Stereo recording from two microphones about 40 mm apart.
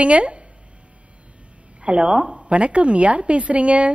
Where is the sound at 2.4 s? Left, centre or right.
Right.